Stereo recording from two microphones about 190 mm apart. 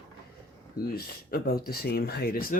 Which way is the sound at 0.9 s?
55° left (ahead or behind).